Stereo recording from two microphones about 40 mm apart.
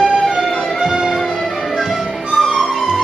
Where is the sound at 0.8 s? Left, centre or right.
Centre.